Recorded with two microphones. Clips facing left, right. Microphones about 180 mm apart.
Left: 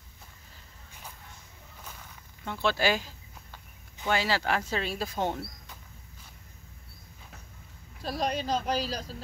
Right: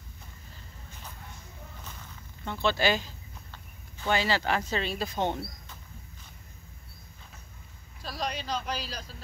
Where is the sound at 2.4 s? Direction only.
5° left (ahead or behind).